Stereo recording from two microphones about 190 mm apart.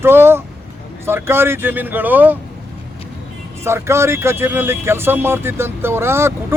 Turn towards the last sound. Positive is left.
turn(degrees=-15)  # may be behind; listen again after turning